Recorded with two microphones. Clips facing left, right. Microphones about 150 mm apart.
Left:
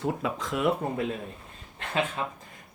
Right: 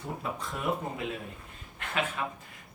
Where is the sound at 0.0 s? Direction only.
90° left.